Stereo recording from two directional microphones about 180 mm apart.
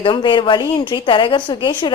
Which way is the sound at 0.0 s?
25° left (ahead or behind).